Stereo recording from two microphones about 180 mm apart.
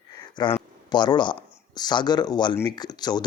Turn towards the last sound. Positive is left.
turn(degrees=25)  # may be behind; listen again after turning